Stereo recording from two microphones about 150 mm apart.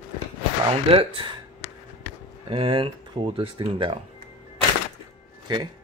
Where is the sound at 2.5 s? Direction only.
35° right (ahead or behind).